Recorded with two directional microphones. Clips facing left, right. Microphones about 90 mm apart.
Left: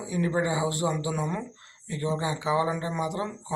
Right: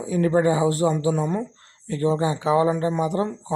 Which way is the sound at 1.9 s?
40° right (ahead or behind).